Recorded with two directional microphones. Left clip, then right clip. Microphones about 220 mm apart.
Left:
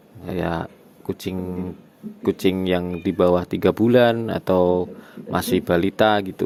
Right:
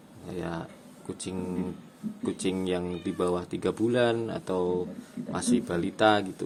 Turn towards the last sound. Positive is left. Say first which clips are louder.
# left 6 dB
turn(degrees=35)  # may be behind; listen again after turning